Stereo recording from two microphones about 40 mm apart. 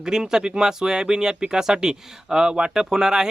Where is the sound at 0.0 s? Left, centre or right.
Centre.